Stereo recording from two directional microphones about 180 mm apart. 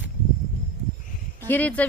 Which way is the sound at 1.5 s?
10° left (ahead or behind).